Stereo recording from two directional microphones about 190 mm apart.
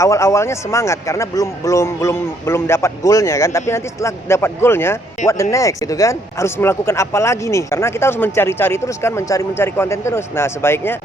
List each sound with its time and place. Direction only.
0.0 s speech: 15° left (ahead or behind)